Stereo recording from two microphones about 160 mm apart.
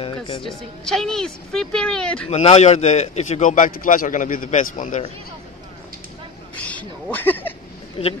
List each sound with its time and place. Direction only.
0.4 s a woman's voice: 5° left (ahead or behind)
2.2 s a man's voice: 40° left (ahead or behind)
6.5 s a sound: 10° left (ahead or behind)
8.0 s speech: 40° left (ahead or behind)